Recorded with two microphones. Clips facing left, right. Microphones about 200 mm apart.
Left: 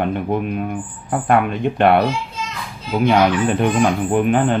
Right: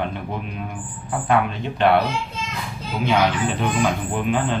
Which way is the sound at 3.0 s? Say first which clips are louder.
Left 5 dB; 55° left (ahead or behind).